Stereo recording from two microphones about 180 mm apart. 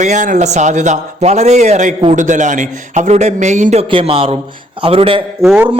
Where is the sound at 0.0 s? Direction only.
45° right (ahead or behind).